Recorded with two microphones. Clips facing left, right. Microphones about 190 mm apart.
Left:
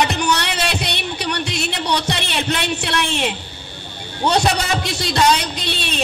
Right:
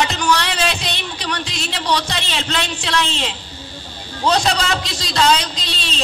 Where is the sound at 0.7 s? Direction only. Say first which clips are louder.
Left 3 dB; 60° left (ahead or behind).